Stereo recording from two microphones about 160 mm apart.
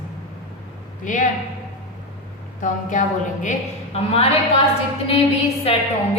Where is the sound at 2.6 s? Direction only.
50° left (ahead or behind).